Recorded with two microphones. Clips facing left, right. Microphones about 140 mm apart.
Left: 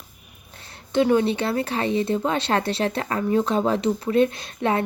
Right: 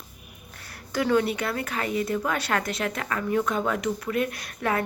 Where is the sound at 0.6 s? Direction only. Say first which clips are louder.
Left 7 dB; 25° left (ahead or behind).